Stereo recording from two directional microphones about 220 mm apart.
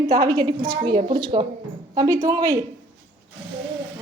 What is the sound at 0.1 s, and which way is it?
A woman's voice, 15° right (ahead or behind).